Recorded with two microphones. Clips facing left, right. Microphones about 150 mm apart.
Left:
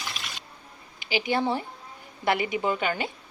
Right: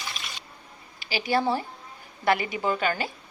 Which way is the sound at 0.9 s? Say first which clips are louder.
Right 1 dB; 20° left (ahead or behind).